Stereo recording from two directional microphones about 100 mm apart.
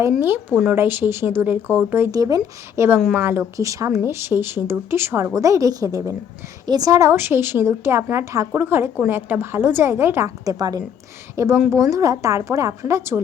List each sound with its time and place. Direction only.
0.5 s speech: 10° right (ahead or behind)
0.8 s a woman's voice: 20° right (ahead or behind)
2.1 s a woman's voice: 35° right (ahead or behind)
11.3 s a woman's voice: 25° right (ahead or behind)